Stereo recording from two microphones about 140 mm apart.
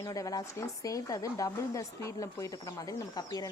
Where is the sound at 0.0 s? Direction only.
25° left (ahead or behind).